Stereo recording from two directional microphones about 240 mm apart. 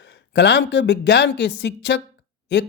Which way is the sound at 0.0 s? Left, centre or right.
Left.